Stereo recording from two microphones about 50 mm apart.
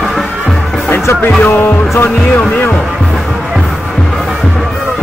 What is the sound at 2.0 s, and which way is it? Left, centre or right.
Speech, left.